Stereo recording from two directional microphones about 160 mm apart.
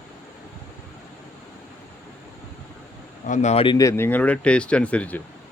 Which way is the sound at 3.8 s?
15° left (ahead or behind).